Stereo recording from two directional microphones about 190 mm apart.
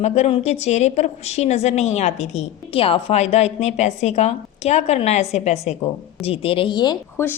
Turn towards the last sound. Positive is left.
turn(degrees=20)  # may be behind; listen again after turning